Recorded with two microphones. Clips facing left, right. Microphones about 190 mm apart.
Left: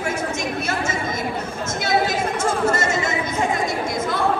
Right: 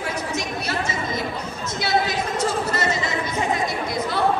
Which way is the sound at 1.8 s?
50° left (ahead or behind).